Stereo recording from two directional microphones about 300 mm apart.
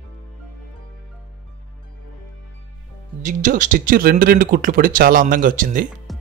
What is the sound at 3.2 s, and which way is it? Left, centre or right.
Speech, right.